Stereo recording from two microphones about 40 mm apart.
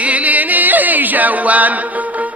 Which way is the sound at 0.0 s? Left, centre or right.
Right.